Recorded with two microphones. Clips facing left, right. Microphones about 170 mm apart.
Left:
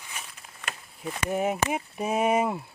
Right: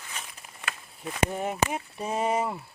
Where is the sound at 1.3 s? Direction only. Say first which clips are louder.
Left 3 dB; 10° left (ahead or behind).